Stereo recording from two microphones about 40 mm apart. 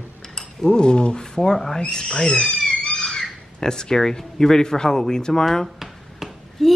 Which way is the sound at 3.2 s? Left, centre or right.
Centre.